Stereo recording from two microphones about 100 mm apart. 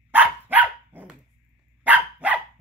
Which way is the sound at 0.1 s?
15° right (ahead or behind).